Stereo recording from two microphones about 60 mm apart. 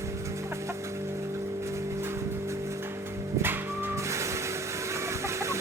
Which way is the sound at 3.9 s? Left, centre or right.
Right.